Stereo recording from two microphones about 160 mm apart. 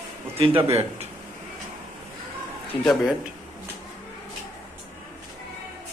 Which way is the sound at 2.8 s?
Centre (ahead or behind).